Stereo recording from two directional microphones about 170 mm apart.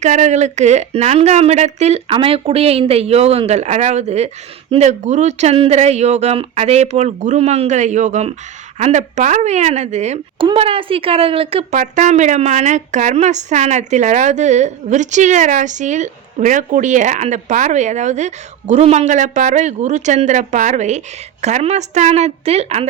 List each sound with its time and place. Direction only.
0.0 s a woman's voice: 45° right (ahead or behind)
11.8 s a woman's voice: 45° right (ahead or behind)